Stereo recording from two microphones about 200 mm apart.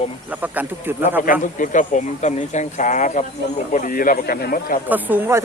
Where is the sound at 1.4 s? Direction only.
40° left (ahead or behind).